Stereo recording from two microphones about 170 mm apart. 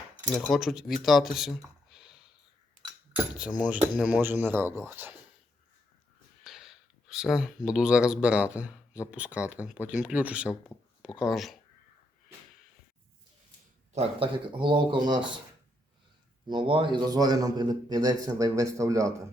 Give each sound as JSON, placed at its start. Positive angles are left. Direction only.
{"t": 0.3, "sound": "speech", "side_deg": 0}
{"t": 3.7, "sound": "speech", "side_deg": -5}
{"t": 6.4, "sound": "speech", "side_deg": 0}
{"t": 13.9, "sound": "a man's voice", "side_deg": -30}
{"t": 16.5, "sound": "a man's voice", "side_deg": -30}